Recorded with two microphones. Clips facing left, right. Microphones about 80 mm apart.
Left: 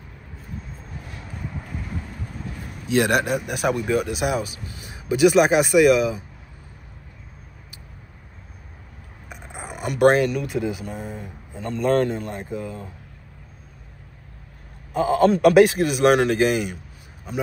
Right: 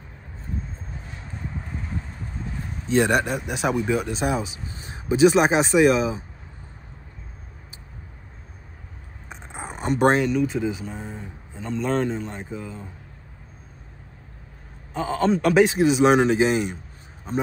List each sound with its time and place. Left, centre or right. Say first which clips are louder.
1.0 s vehicle: left 2 dB; right
2.0 s vehicle: left 1 dB; left
2.8 s speech: even; centre
4.6 s a sound: even; right
5.5 s speech: left 2 dB; right
9.5 s a sound: right 3 dB; right
9.9 s a man's voice: left 2 dB; centre
15.0 s a man's voice: left 4 dB; centre
16.6 s a sound: right 1 dB; right